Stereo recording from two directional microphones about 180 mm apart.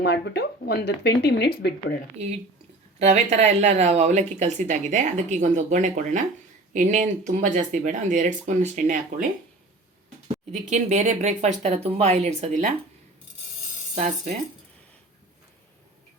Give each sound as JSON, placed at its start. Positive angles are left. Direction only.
{"t": 0.0, "sound": "speech", "side_deg": 70}
{"t": 3.0, "sound": "speech", "side_deg": -40}
{"t": 10.5, "sound": "speech", "side_deg": -40}
{"t": 13.9, "sound": "speech", "side_deg": -40}